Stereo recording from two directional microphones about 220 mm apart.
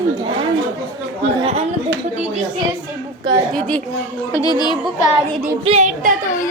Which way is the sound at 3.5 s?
5° left (ahead or behind).